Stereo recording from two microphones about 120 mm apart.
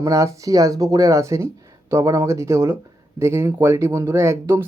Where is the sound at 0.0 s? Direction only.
25° right (ahead or behind).